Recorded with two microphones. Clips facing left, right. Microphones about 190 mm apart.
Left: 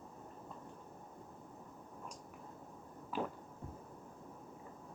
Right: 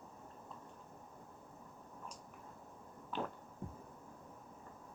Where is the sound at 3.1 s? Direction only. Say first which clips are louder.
Left 2 dB; 5° left (ahead or behind).